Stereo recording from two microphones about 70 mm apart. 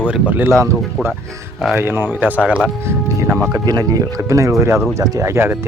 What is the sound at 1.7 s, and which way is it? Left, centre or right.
Speech, right.